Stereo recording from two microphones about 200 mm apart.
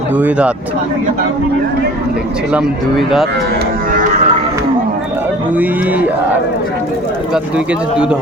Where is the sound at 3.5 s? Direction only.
45° right (ahead or behind).